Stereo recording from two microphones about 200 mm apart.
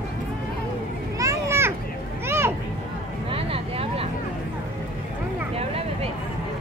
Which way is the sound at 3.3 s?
30° right (ahead or behind).